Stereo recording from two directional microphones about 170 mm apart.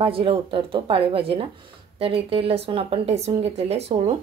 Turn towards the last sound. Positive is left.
turn(degrees=-40)  # may be behind; listen again after turning